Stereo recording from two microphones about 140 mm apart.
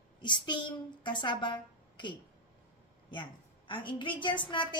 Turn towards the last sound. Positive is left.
turn(degrees=35)  # may be behind; listen again after turning